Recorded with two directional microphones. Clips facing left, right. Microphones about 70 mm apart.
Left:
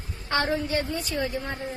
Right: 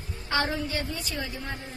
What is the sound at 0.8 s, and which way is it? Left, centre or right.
Speech, left.